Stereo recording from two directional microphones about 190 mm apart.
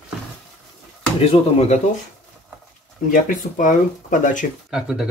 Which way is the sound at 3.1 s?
45° left (ahead or behind).